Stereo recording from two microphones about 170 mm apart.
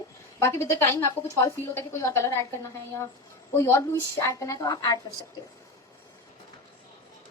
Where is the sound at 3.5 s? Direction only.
15° left (ahead or behind).